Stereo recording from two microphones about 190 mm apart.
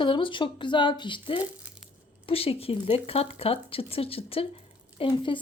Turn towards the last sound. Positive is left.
turn(degrees=25)  # may be behind; listen again after turning